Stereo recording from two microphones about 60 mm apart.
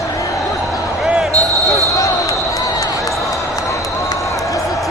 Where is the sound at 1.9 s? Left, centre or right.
Left.